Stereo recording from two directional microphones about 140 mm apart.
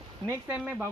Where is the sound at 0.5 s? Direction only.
10° right (ahead or behind).